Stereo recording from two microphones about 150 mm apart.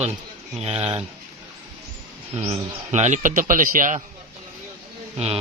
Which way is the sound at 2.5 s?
50° right (ahead or behind).